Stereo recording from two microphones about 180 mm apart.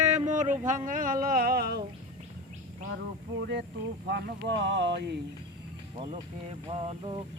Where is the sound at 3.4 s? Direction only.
75° right (ahead or behind).